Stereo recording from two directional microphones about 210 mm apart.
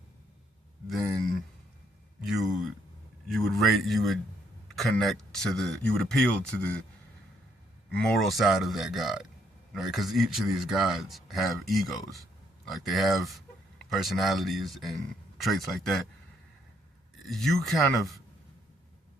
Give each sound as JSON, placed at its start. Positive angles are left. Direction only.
{"t": 0.9, "sound": "a sound", "side_deg": 0}
{"t": 3.2, "sound": "a man's voice", "side_deg": 0}
{"t": 7.9, "sound": "a man's voice", "side_deg": 5}
{"t": 17.2, "sound": "a man's voice", "side_deg": 0}